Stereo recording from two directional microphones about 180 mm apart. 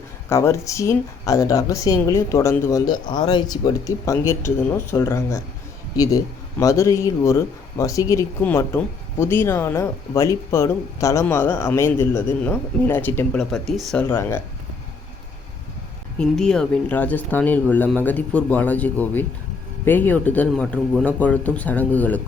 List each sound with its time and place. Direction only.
0.3 s a woman's voice: 15° left (ahead or behind)
14.1 s a woman's voice: 15° left (ahead or behind)
16.1 s a woman's voice: 5° left (ahead or behind)